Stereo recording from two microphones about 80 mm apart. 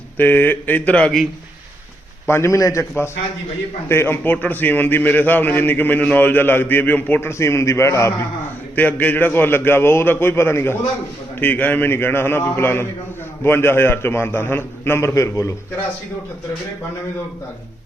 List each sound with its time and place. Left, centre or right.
0.2 s a man's voice: left
0.9 s a man's voice: centre
2.2 s a man's voice: left
3.8 s a man's voice: left
8.7 s a man's voice: left